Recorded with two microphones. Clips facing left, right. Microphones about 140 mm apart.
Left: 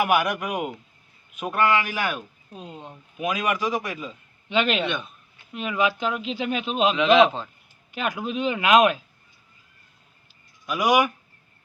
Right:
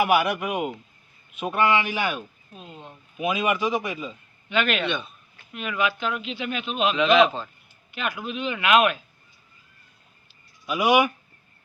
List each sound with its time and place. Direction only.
0.0 s a man's voice: 5° right (ahead or behind)
2.5 s speech: 30° left (ahead or behind)
3.2 s speech: 5° right (ahead or behind)
4.4 s speech: 30° left (ahead or behind)
4.9 s a man's voice: 5° left (ahead or behind)
5.5 s speech: 30° left (ahead or behind)
6.9 s a man's voice: 10° left (ahead or behind)
7.9 s speech: 40° left (ahead or behind)
10.8 s speech: 10° right (ahead or behind)